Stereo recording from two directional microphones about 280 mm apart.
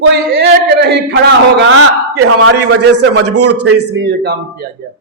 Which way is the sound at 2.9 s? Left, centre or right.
Right.